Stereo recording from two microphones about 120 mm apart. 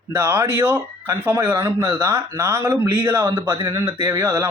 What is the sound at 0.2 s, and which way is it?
A man's voice, 25° right (ahead or behind).